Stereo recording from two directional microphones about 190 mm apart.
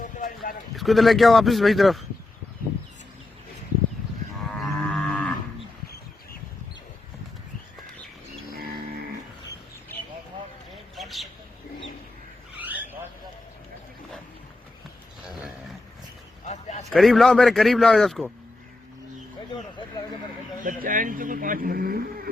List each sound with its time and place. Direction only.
0.8 s a man's voice: centre (ahead or behind)
4.5 s livestock: 5° left (ahead or behind)
10.9 s vehicle: centre (ahead or behind)
12.5 s vehicle: 10° right (ahead or behind)
15.3 s a sound: centre (ahead or behind)
16.5 s a sound: 35° left (ahead or behind)
16.9 s a man's voice: centre (ahead or behind)
20.7 s a man's voice: 45° right (ahead or behind)